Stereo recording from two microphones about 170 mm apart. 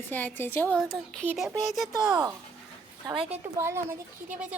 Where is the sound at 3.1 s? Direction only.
30° right (ahead or behind).